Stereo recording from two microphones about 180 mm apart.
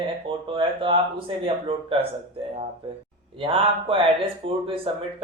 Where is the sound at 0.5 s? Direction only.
30° right (ahead or behind).